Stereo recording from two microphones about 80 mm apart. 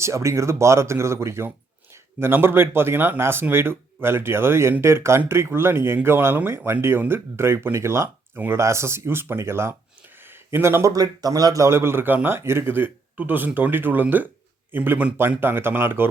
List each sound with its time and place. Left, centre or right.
0.0 s speech: right
10.2 s a sound: right
10.9 s a man's voice: right